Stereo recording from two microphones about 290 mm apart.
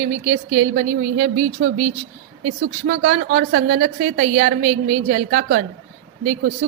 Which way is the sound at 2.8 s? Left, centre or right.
Right.